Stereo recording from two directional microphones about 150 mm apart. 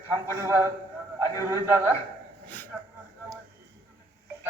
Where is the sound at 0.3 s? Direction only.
15° right (ahead or behind).